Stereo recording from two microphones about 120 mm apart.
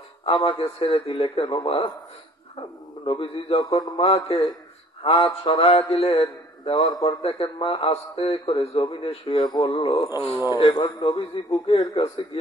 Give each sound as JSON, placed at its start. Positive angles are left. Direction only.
{"t": 0.2, "sound": "a man's voice", "side_deg": 45}
{"t": 3.1, "sound": "a man's voice", "side_deg": 50}